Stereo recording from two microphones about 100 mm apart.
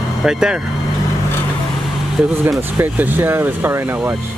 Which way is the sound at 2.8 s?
20° right (ahead or behind).